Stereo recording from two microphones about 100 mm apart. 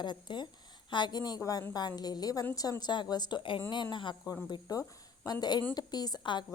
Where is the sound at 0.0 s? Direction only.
50° left (ahead or behind).